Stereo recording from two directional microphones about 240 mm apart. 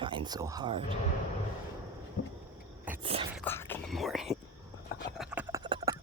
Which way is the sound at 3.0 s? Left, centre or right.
Right.